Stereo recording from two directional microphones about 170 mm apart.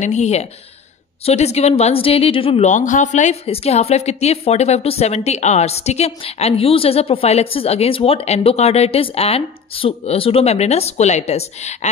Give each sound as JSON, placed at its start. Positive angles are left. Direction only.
{"t": 0.0, "sound": "speech", "side_deg": 40}